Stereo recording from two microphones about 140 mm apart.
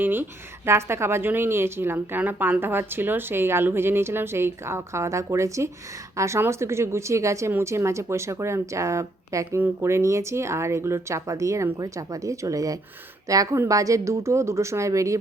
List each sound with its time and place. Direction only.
0.0 s speech: 15° right (ahead or behind)